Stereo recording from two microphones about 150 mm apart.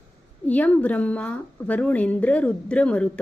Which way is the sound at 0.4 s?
10° left (ahead or behind).